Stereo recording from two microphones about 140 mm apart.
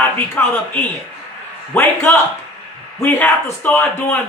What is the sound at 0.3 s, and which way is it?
A man's voice, 15° left (ahead or behind).